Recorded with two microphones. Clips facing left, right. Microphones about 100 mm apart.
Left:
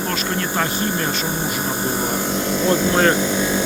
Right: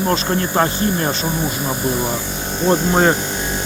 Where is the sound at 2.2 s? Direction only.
90° left.